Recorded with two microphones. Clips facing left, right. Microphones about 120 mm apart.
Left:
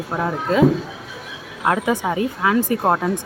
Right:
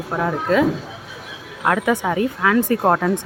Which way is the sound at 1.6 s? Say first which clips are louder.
Right 1 dB; 25° left (ahead or behind).